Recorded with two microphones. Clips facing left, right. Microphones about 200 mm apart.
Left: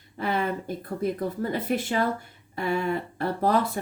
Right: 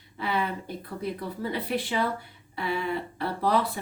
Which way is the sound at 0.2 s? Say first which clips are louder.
Left 2 dB; 45° left (ahead or behind).